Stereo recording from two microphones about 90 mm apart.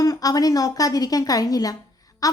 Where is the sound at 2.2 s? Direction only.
40° left (ahead or behind).